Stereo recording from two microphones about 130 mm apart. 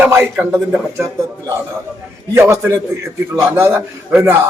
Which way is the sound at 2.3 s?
20° right (ahead or behind).